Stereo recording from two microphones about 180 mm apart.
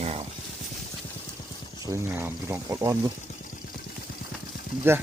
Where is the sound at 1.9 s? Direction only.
15° right (ahead or behind).